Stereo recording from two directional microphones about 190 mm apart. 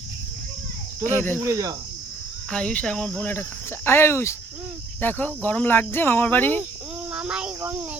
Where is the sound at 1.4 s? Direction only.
15° right (ahead or behind).